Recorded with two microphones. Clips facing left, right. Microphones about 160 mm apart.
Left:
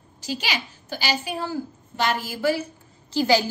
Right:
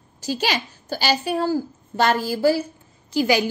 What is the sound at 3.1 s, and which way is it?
Speech, 15° right (ahead or behind).